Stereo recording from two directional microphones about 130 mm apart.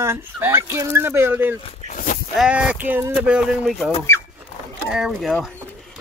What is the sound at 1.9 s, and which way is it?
Sheep, 90° left.